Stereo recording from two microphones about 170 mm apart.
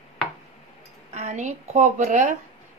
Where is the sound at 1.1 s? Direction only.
40° right (ahead or behind).